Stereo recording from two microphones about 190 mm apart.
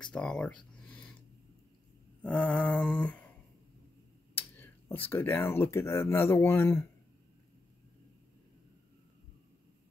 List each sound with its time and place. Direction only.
0.0 s speech: 5° left (ahead or behind)
0.8 s gasp: 10° left (ahead or behind)
2.2 s mantra: 10° left (ahead or behind)
4.4 s speech: 10° left (ahead or behind)